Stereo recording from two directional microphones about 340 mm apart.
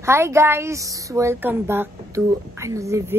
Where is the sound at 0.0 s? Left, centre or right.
Centre.